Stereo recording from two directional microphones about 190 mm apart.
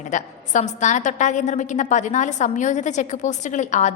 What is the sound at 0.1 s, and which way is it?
A woman's voice, 40° left (ahead or behind).